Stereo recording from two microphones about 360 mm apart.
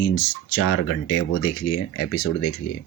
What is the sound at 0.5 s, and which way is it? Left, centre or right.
Speech, left.